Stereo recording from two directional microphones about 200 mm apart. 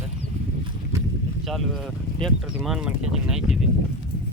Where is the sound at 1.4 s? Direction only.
Centre (ahead or behind).